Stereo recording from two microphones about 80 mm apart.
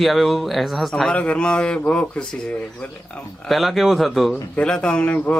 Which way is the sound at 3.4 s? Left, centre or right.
Centre.